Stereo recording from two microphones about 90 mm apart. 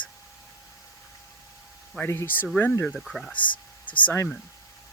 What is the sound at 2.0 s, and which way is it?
Speech, 25° left (ahead or behind).